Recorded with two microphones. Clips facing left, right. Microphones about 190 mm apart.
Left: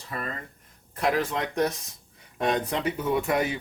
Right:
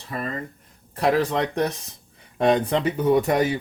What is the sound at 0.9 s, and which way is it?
Speech, 35° right (ahead or behind).